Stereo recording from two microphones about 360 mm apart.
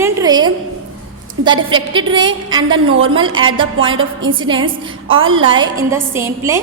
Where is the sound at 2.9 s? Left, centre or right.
Right.